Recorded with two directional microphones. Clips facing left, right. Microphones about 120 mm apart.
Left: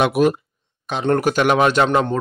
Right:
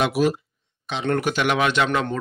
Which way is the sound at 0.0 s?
55° left (ahead or behind).